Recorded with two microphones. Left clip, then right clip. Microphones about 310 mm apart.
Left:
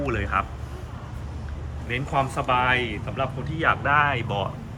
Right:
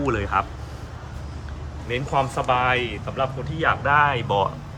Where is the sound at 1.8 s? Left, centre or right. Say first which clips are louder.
Right 2 dB; centre.